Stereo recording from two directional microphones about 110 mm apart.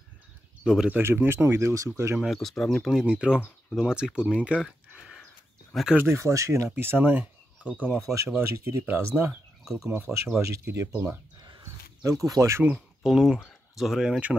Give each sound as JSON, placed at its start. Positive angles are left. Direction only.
{"t": 0.7, "sound": "speech", "side_deg": -5}
{"t": 0.9, "sound": "speech", "side_deg": -20}
{"t": 2.1, "sound": "speech", "side_deg": 0}
{"t": 4.6, "sound": "a sound", "side_deg": 0}
{"t": 5.9, "sound": "speech", "side_deg": -25}
{"t": 8.0, "sound": "speech", "side_deg": -30}
{"t": 12.0, "sound": "speech", "side_deg": -30}
{"t": 13.0, "sound": "speech", "side_deg": 0}